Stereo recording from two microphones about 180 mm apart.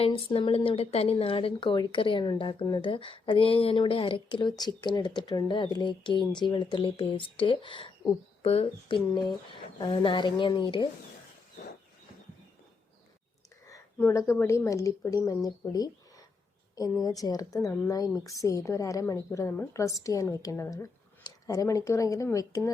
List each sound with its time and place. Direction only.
0.0 s speech: 30° left (ahead or behind)
13.7 s speech: 15° left (ahead or behind)